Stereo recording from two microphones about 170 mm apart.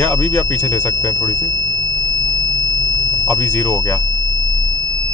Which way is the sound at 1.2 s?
20° left (ahead or behind).